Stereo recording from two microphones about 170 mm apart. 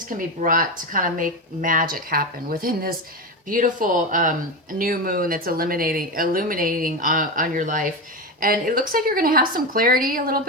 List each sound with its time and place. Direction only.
0.2 s speech: 55° right (ahead or behind)